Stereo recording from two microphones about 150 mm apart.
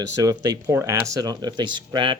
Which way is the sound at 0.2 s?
25° right (ahead or behind).